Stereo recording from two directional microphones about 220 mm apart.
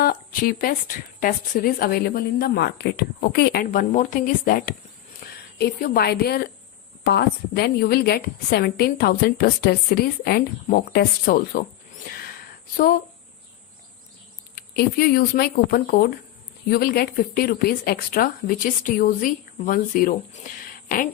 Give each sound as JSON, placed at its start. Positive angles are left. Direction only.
{"t": 0.0, "sound": "a woman's voice", "side_deg": 40}
{"t": 5.2, "sound": "a sound", "side_deg": 45}
{"t": 5.5, "sound": "a woman's voice", "side_deg": 45}
{"t": 14.5, "sound": "a woman's voice", "side_deg": 45}